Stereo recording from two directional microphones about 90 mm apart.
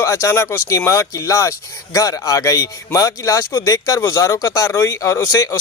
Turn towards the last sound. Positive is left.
turn(degrees=35)  # may be behind; listen again after turning